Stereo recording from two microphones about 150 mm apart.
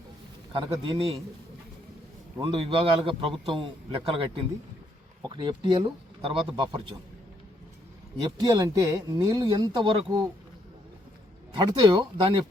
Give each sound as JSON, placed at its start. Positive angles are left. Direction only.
{"t": 0.5, "sound": "a man's voice", "side_deg": -35}
{"t": 2.4, "sound": "a man's voice", "side_deg": -35}
{"t": 8.2, "sound": "speech", "side_deg": -25}
{"t": 11.5, "sound": "speech", "side_deg": -30}